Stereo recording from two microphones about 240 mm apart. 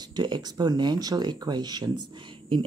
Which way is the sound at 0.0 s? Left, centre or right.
Centre.